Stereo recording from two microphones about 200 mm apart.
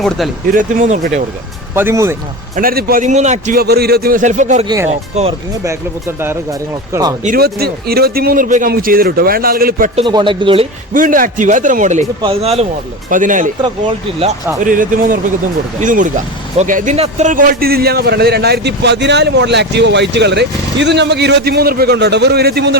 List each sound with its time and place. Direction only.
0.5 s a man's voice: 40° right (ahead or behind)
1.7 s speech: 10° right (ahead or behind)
2.6 s a man's voice: 50° right (ahead or behind); by 5.3 s 35° right (ahead or behind)
5.6 s speech: 10° right (ahead or behind)
7.3 s speech: 50° right (ahead or behind)
9.9 s speech: 25° right (ahead or behind)
10.9 s a man's voice: 40° right (ahead or behind)
13.1 s a man's voice: 40° right (ahead or behind)
14.6 s a man's voice: 40° right (ahead or behind)